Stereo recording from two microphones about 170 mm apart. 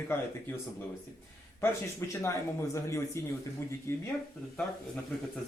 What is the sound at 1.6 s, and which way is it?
Speech, 15° left (ahead or behind).